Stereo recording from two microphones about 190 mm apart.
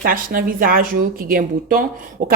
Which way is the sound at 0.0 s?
50° right (ahead or behind).